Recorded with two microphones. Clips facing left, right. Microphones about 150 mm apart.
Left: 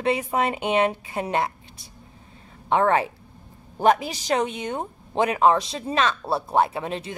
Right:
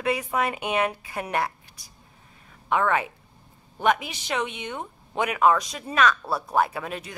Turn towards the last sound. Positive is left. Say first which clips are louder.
# left 4 dB
turn(degrees=25)  # may be behind; listen again after turning